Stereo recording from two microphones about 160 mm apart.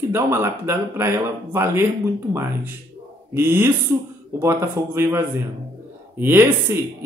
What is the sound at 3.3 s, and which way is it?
Speech, 15° right (ahead or behind).